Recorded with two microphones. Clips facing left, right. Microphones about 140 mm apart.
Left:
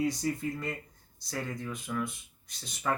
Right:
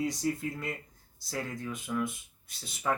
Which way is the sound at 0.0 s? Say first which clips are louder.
Left 1 dB; centre (ahead or behind).